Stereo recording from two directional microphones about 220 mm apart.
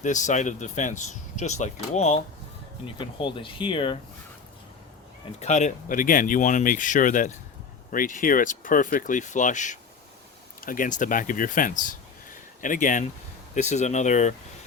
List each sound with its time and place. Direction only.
0.0 s speech: 35° left (ahead or behind)
5.4 s speech: 35° left (ahead or behind)